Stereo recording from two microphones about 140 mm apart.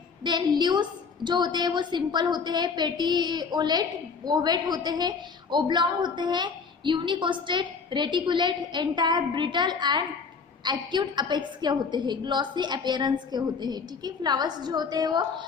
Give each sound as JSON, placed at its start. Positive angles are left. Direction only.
{"t": 0.3, "sound": "a woman's voice", "side_deg": -30}